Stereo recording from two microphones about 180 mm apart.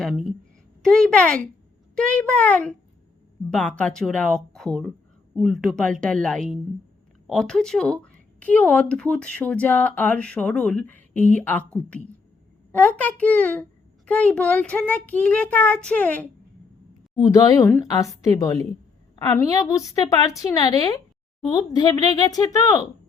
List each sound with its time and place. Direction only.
0.0 s a woman's voice: centre (ahead or behind)
17.2 s a woman's voice: 20° left (ahead or behind)